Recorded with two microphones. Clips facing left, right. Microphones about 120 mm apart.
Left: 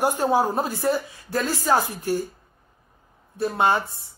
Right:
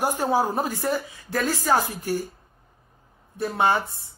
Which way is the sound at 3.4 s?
15° left (ahead or behind).